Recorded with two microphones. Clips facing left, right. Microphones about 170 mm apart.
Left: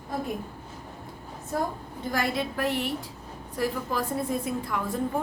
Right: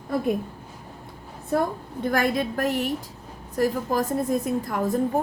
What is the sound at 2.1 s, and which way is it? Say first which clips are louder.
A woman's voice: right 4 dB; 50° right (ahead or behind).